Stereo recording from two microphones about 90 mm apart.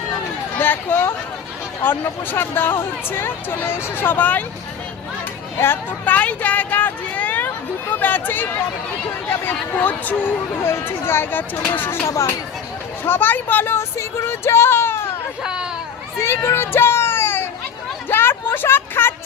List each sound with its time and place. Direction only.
0.5 s speech: 20° left (ahead or behind)
5.5 s speech: 25° left (ahead or behind)
12.0 s speech: 35° left (ahead or behind)
13.1 s speech: 20° left (ahead or behind)
15.4 s speech: 10° right (ahead or behind)
16.2 s children playing: 30° left (ahead or behind)
18.1 s a sound: 25° left (ahead or behind)